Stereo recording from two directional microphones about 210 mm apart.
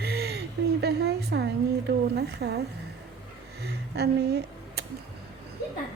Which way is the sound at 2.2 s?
50° right (ahead or behind).